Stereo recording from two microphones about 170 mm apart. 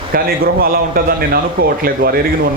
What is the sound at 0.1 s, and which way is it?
A man's voice, 60° right (ahead or behind).